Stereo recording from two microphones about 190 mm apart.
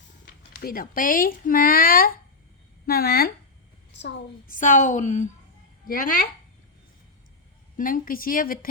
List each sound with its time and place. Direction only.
0.3 s a woman's voice: 50° left (ahead or behind)
4.4 s a woman's voice: 45° left (ahead or behind)
7.8 s a woman's voice: 45° left (ahead or behind)